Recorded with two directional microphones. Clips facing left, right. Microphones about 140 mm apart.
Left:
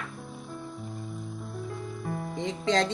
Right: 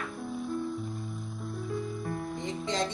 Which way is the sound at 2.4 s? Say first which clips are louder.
Left 9 dB; 90° left.